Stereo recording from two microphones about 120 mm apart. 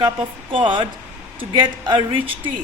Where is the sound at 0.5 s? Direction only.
45° right (ahead or behind).